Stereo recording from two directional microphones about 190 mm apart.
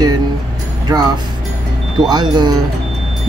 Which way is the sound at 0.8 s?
20° right (ahead or behind).